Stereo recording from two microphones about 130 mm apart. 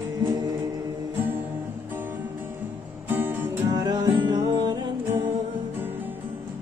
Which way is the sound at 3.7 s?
30° right (ahead or behind).